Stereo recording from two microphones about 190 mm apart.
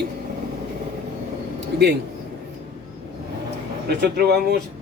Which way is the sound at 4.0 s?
60° right (ahead or behind).